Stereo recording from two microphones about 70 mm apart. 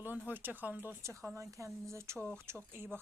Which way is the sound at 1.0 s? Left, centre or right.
Right.